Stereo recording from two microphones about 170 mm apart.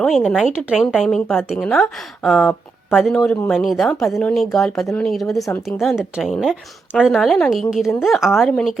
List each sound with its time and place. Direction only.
0.0 s speech: centre (ahead or behind)
5.4 s a woman's voice: 15° left (ahead or behind)
5.8 s speech: centre (ahead or behind)